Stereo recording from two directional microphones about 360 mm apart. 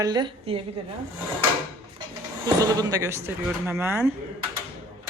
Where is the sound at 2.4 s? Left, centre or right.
Centre.